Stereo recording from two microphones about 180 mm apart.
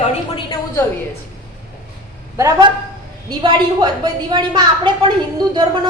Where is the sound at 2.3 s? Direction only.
15° right (ahead or behind).